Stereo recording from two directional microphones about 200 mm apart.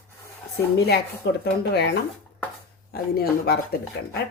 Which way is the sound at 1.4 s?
55° left (ahead or behind).